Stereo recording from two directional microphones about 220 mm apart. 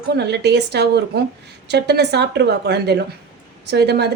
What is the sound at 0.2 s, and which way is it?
A woman's voice, 50° right (ahead or behind).